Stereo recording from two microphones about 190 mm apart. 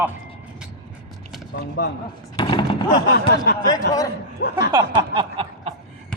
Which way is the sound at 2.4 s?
25° left (ahead or behind).